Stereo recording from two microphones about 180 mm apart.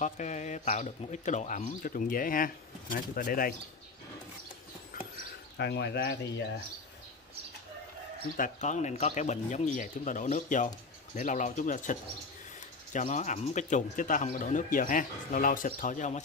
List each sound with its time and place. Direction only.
0.0 s speech: 40° left (ahead or behind)
5.6 s speech: 70° left (ahead or behind)
8.4 s speech: 40° left (ahead or behind)